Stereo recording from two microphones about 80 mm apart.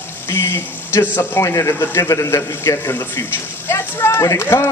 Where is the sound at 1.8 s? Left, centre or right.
Left.